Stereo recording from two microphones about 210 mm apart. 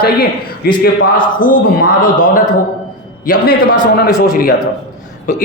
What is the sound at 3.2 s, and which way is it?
Speech, 40° left (ahead or behind).